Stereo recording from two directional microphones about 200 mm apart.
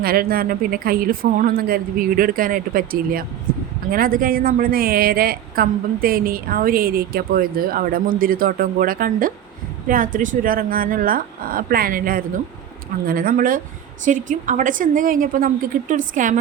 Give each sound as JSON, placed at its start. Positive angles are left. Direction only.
{"t": 0.0, "sound": "a woman's voice", "side_deg": -50}